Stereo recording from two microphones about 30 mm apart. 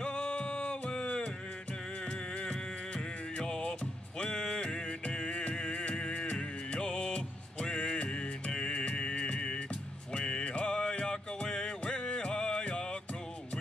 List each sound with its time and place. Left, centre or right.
0.0 s music: left
3.3 s music: left
4.6 s music: left